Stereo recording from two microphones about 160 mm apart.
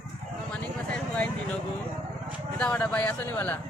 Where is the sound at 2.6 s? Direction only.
5° left (ahead or behind).